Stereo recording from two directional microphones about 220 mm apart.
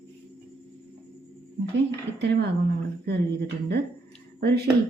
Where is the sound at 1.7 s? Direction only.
50° right (ahead or behind).